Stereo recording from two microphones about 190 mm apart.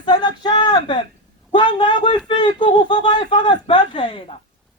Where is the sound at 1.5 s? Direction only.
25° left (ahead or behind).